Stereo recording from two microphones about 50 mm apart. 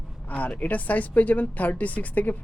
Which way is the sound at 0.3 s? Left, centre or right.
Left.